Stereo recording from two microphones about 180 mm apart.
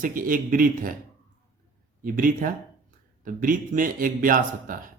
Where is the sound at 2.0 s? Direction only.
50° right (ahead or behind).